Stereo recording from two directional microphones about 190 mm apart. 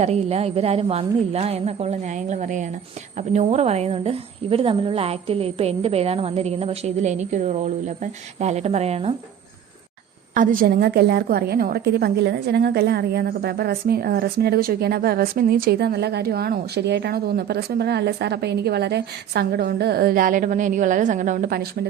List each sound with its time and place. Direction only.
0.0 s a woman's voice: 35° right (ahead or behind)
10.3 s a woman's voice: 45° right (ahead or behind)